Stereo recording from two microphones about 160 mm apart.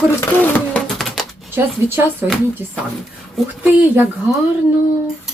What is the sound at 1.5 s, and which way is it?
Speech, 15° right (ahead or behind).